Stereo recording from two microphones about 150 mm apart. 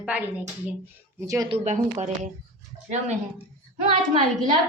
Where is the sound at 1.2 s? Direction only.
20° right (ahead or behind).